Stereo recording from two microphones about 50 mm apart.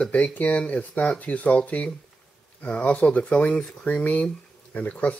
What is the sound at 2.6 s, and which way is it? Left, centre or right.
Speech, left.